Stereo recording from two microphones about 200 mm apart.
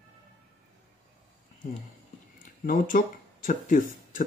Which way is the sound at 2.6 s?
45° left (ahead or behind).